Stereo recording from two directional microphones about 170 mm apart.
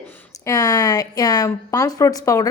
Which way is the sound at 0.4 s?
20° left (ahead or behind).